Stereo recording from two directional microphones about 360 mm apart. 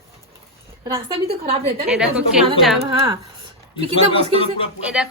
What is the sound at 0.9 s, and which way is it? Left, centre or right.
A woman's voice, centre.